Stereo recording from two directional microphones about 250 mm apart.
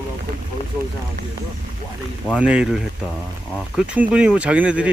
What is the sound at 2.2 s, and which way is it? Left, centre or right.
Speech, centre.